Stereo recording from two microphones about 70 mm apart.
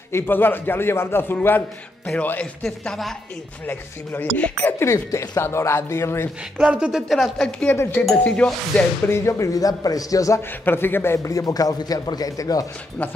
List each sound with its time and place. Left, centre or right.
0.1 s a man's voice: left
2.6 s speech: centre
3.6 s speech: left
4.8 s a man's voice: left
6.6 s speech: centre
7.3 s speech: centre
7.7 s a man's voice: left
8.2 s speech: centre
9.0 s speech: left
10.6 s a man's voice: left
11.2 s speech: left